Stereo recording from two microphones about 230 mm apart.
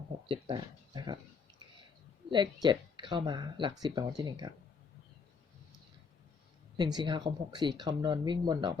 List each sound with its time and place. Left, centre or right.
0.3 s a sound: centre
2.3 s speech: centre
6.7 s speech: centre